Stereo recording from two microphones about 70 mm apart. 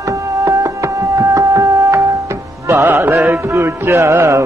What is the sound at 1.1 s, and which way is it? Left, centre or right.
Knock, right.